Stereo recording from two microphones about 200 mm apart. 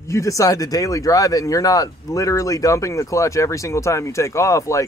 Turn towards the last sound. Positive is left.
turn(degrees=15)  # may be behind; listen again after turning